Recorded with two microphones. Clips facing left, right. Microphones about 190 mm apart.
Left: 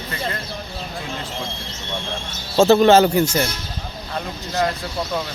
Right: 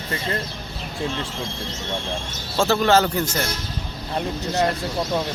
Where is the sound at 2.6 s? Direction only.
20° left (ahead or behind).